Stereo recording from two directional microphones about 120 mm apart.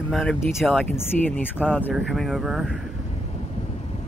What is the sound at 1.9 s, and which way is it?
Speech, centre (ahead or behind).